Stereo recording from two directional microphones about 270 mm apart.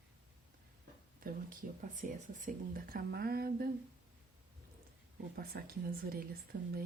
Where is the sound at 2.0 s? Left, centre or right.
Right.